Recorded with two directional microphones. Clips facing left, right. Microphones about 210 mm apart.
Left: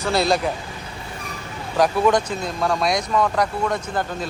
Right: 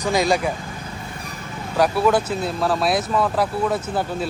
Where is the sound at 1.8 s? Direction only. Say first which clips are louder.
Even; 10° right (ahead or behind).